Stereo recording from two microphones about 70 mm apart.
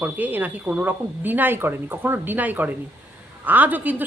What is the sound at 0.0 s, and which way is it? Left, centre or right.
Speech, right.